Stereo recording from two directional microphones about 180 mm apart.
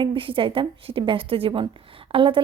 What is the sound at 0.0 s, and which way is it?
A woman's voice, 30° right (ahead or behind).